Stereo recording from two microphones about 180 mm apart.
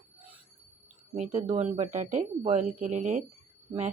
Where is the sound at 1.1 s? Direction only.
35° right (ahead or behind).